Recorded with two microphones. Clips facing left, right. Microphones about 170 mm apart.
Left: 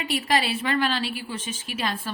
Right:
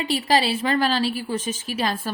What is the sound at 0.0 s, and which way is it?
A woman's voice, 30° right (ahead or behind).